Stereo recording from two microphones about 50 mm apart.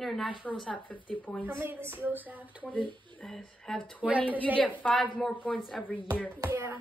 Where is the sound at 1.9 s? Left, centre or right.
Right.